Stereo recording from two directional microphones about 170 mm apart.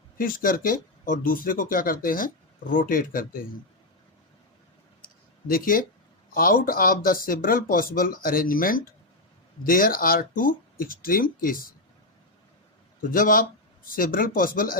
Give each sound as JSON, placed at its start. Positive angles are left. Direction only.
{"t": 0.2, "sound": "speech", "side_deg": 55}
{"t": 5.0, "sound": "a sound", "side_deg": 60}
{"t": 6.3, "sound": "speech", "side_deg": 60}
{"t": 13.0, "sound": "speech", "side_deg": 55}